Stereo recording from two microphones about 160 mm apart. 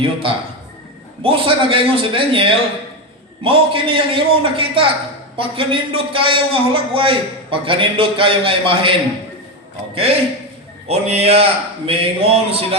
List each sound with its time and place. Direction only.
0.0 s a man's voice: 35° right (ahead or behind)